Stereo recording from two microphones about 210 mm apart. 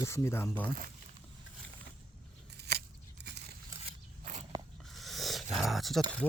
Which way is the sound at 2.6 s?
50° right (ahead or behind).